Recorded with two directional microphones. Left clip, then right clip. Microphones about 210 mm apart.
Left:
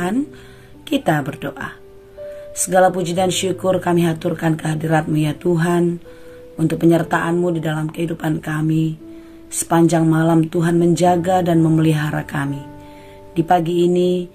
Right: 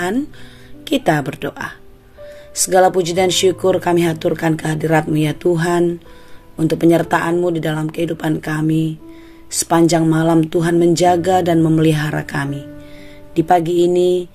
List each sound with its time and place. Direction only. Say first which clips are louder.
0.8 s speech: right 2 dB; 45° right (ahead or behind)